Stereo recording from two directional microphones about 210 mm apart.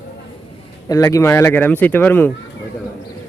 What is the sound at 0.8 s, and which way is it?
Speech, 15° left (ahead or behind).